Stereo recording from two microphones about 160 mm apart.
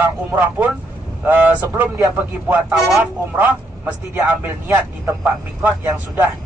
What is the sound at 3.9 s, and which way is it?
Speech, 10° right (ahead or behind).